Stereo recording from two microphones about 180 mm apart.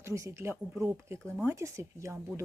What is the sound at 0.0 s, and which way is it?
Speech, 15° right (ahead or behind).